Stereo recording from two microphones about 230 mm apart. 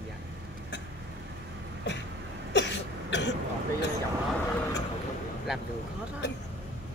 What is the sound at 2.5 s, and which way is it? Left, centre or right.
Cough, left.